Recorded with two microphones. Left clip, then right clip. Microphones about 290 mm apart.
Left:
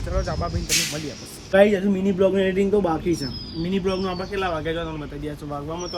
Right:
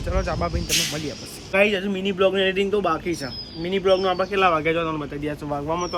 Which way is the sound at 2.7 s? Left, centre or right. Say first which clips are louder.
Left 1 dB; left.